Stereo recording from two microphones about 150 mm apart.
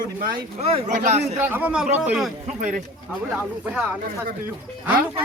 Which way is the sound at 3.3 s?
10° right (ahead or behind).